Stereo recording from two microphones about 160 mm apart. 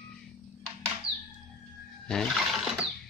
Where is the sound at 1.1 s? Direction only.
65° left (ahead or behind).